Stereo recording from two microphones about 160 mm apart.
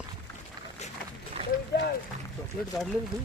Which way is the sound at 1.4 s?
35° right (ahead or behind).